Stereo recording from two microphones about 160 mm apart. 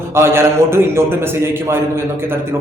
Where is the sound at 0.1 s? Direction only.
15° right (ahead or behind).